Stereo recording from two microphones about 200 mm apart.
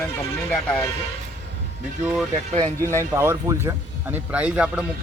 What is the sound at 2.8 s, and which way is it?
Speech, 15° right (ahead or behind).